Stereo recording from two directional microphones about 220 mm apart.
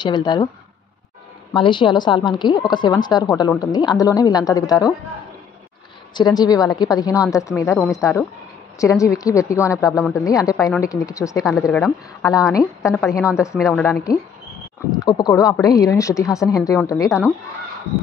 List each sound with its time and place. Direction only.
0.0 s a woman's voice: 20° left (ahead or behind)
1.5 s a woman's voice: 20° left (ahead or behind)
6.1 s speech: 20° left (ahead or behind)
13.6 s a woman's voice: centre (ahead or behind)
14.9 s speech: 20° left (ahead or behind)